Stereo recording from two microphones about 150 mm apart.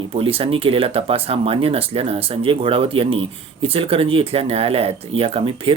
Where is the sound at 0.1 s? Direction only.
40° right (ahead or behind).